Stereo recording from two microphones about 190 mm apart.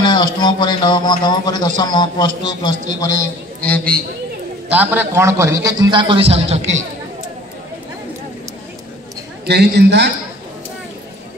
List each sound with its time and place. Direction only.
0.0 s a man's voice: 25° left (ahead or behind)
3.6 s a man's voice: 5° left (ahead or behind)
4.6 s a man's voice: 10° right (ahead or behind); by 6.8 s 35° right (ahead or behind)
9.5 s a man's voice: 60° right (ahead or behind)